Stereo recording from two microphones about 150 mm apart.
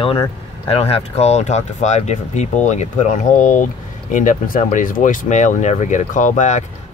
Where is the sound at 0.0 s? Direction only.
35° left (ahead or behind).